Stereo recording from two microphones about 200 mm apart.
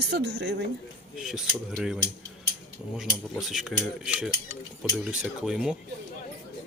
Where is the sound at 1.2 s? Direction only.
5° right (ahead or behind).